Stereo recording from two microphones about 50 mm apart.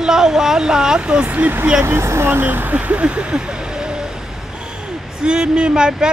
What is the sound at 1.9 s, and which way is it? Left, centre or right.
Speech, right.